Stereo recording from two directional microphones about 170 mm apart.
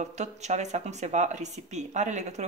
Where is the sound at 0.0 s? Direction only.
40° right (ahead or behind).